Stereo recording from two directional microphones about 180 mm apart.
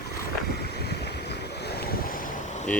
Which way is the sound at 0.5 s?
65° left (ahead or behind).